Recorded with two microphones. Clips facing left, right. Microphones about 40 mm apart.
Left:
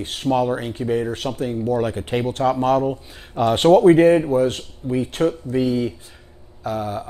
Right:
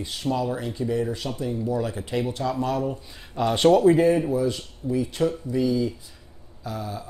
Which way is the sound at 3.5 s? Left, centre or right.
Left.